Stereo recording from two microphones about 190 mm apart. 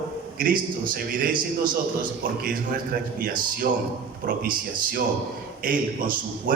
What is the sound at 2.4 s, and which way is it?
A man's voice, 50° right (ahead or behind).